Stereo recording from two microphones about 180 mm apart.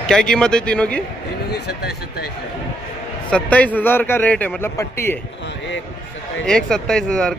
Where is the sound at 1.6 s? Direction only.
65° left (ahead or behind).